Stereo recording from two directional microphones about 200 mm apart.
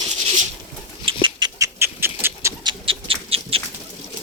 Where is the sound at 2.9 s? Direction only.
30° right (ahead or behind).